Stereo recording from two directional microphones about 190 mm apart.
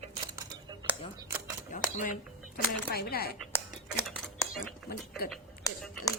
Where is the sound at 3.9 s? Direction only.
Centre (ahead or behind).